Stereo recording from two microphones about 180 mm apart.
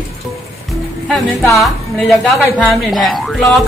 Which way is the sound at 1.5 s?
Centre (ahead or behind).